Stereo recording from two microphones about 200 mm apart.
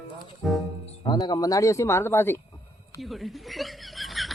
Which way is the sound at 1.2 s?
20° left (ahead or behind).